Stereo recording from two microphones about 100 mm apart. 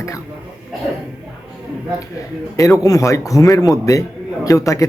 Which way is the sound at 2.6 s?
35° left (ahead or behind).